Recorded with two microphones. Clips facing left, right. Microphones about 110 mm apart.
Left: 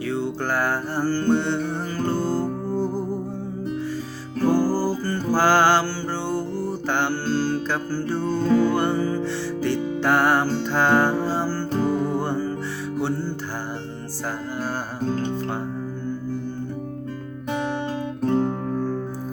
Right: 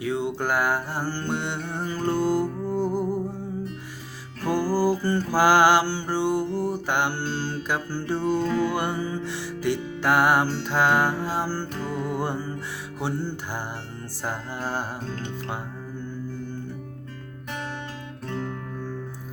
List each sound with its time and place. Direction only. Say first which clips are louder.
0.0 s music: left 1 dB; 15° right (ahead or behind)
4.4 s music: left 4 dB; 40° left (ahead or behind)
5.3 s mantra: even; 15° right (ahead or behind)
8.4 s music: left 5 dB; 45° left (ahead or behind)
8.7 s music: left 5 dB; 15° right (ahead or behind)
11.7 s music: left 7 dB; 35° left (ahead or behind)
13.0 s music: left 3 dB; 15° right (ahead or behind)
15.0 s music: left 9 dB; 40° left (ahead or behind)
18.2 s music: left 10 dB; 40° left (ahead or behind)